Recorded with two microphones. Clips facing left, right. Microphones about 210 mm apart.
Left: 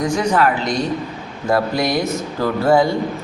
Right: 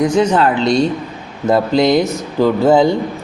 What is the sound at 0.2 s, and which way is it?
A man's voice, 25° right (ahead or behind).